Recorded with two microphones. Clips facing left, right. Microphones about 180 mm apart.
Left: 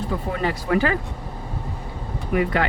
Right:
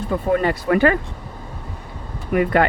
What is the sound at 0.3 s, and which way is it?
Speech, 55° right (ahead or behind).